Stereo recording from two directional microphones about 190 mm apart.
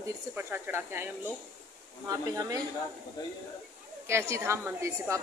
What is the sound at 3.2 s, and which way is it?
Speech, 20° left (ahead or behind).